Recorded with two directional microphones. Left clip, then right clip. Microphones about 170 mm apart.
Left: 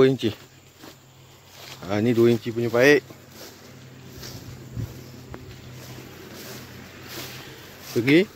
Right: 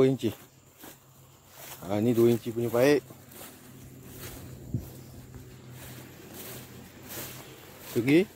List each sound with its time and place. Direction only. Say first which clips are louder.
0.0 s speech: left 6 dB; 10° right (ahead or behind)
1.9 s speech: left 4 dB; 10° right (ahead or behind)
8.0 s speech: left 5 dB; 5° right (ahead or behind)